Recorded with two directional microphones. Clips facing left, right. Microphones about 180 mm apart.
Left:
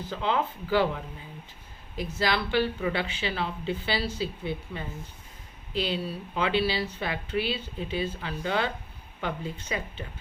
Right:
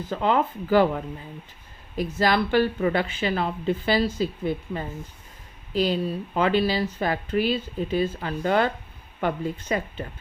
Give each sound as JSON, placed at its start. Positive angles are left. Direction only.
{"t": 0.1, "sound": "speech", "side_deg": -50}
{"t": 2.0, "sound": "speech", "side_deg": -45}